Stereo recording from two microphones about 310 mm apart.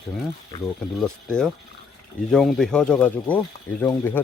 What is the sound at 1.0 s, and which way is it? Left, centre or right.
Speech, centre.